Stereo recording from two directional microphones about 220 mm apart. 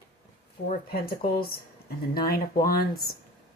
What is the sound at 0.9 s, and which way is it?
Speech, 45° left (ahead or behind).